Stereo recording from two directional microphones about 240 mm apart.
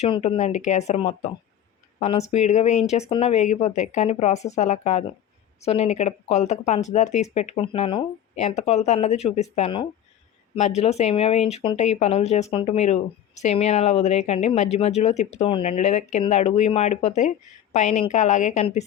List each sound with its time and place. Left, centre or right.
0.0 s speech: left